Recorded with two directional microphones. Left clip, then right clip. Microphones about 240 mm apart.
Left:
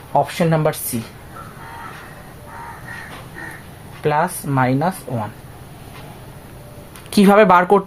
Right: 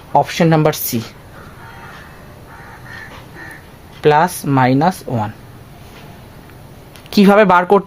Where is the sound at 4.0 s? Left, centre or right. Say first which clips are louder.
Right 6 dB; right.